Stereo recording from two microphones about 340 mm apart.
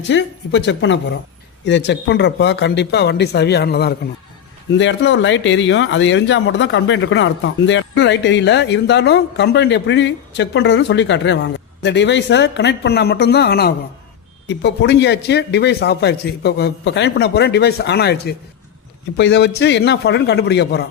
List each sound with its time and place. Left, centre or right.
0.1 s speech: left